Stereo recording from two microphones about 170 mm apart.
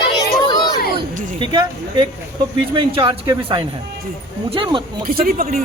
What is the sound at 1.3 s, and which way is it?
A man's voice, 30° right (ahead or behind).